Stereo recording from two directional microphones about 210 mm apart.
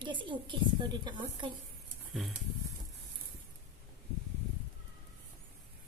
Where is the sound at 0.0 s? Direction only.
25° right (ahead or behind).